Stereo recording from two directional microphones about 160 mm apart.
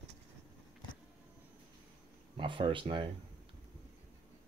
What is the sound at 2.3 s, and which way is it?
Speech, 30° right (ahead or behind).